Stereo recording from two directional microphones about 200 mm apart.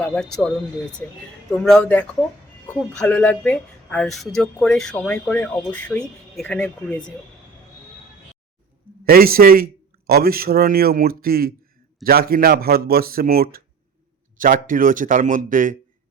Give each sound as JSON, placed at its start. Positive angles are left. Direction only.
{"t": 0.0, "sound": "speech", "side_deg": 5}
{"t": 1.5, "sound": "speech", "side_deg": 5}
{"t": 9.0, "sound": "speech", "side_deg": -50}